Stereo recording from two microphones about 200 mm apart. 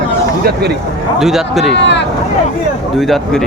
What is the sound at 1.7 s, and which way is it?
Speech, 60° left (ahead or behind).